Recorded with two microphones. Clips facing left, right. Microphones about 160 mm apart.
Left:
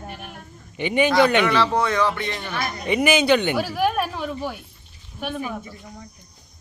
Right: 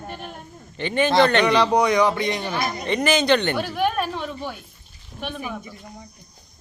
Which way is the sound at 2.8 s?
10° left (ahead or behind).